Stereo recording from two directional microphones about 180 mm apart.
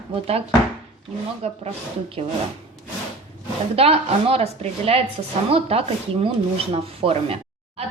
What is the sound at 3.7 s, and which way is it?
Rub, 35° right (ahead or behind).